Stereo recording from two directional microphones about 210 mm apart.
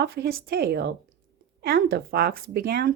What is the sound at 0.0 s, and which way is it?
Speech, 45° right (ahead or behind).